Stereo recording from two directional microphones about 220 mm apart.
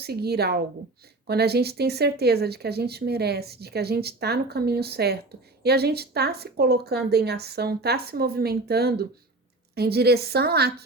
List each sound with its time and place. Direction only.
0.0 s speech: 45° right (ahead or behind)